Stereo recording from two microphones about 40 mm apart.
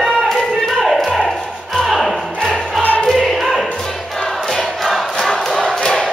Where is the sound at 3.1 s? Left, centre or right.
Centre.